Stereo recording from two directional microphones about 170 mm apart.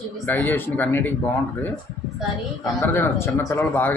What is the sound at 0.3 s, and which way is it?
Speech, 10° left (ahead or behind).